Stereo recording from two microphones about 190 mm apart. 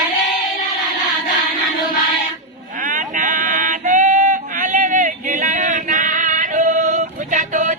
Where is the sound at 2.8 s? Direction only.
45° right (ahead or behind).